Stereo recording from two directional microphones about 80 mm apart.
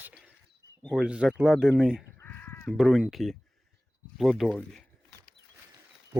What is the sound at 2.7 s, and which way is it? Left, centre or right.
Speech, centre.